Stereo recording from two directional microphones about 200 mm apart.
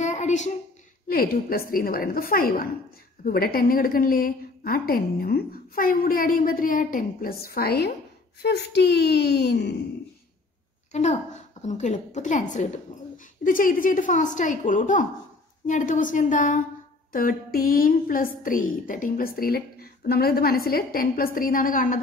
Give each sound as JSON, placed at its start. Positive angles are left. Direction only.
{"t": 0.0, "sound": "a sound", "side_deg": 35}
{"t": 1.0, "sound": "a woman's voice", "side_deg": 45}
{"t": 10.9, "sound": "a woman's voice", "side_deg": 35}